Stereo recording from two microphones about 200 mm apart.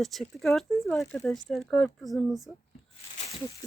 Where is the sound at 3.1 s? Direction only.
35° left (ahead or behind).